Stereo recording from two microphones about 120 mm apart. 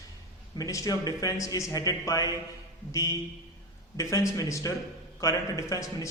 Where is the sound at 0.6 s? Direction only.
30° left (ahead or behind).